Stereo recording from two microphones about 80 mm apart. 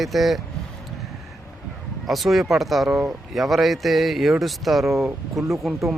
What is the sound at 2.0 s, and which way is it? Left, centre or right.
Speech, centre.